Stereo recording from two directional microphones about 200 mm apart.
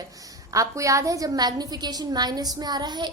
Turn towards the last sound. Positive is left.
turn(degrees=-20)  # may be behind; listen again after turning